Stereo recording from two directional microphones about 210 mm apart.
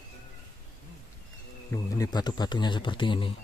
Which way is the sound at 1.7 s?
20° left (ahead or behind).